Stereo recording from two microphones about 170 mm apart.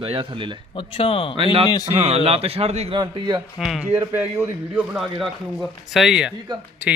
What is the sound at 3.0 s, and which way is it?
Speech, 25° right (ahead or behind).